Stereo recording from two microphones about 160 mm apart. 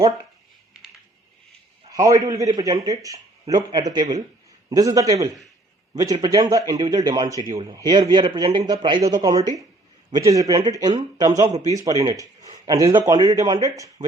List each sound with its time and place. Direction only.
1.9 s a man's voice: 20° right (ahead or behind)